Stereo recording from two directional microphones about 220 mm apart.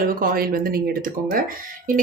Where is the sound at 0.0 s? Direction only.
40° right (ahead or behind).